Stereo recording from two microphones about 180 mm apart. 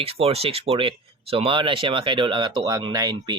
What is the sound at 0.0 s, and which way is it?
Speech, 35° right (ahead or behind).